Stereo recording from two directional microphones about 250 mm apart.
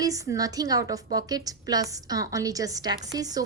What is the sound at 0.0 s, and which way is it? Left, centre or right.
A woman's voice, centre.